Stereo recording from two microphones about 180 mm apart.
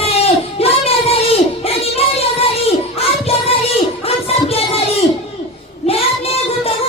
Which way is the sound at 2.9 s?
35° left (ahead or behind).